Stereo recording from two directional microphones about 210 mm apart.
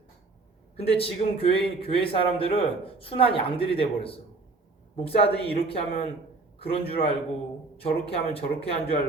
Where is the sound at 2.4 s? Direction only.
25° left (ahead or behind).